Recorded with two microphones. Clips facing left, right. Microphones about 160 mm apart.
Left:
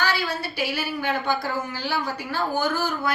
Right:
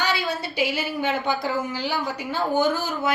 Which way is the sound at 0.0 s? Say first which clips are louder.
Even; 20° right (ahead or behind).